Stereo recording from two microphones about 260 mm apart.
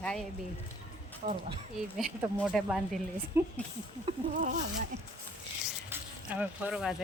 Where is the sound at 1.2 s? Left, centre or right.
Right.